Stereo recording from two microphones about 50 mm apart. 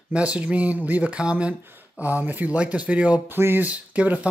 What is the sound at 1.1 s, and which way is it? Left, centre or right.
Speech, centre.